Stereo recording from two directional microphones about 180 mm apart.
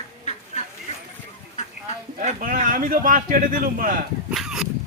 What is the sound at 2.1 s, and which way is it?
A man's voice, 50° right (ahead or behind).